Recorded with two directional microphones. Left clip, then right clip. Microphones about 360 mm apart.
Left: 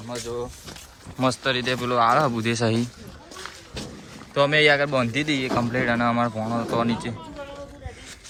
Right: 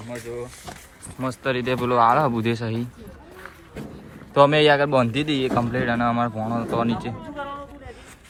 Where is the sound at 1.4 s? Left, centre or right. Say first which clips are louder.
Right 1 dB; centre.